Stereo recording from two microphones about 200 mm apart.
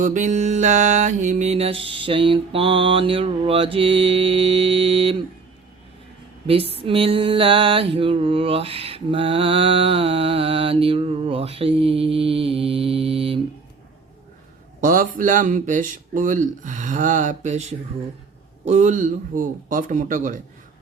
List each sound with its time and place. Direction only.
0.0 s mantra: 40° right (ahead or behind)
6.5 s mantra: 30° right (ahead or behind)
14.8 s speech: 45° right (ahead or behind)